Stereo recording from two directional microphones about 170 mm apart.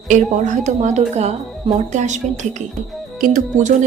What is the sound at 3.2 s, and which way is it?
Speech, 55° right (ahead or behind).